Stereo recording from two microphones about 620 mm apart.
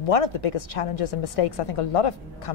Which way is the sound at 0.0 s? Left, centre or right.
Left.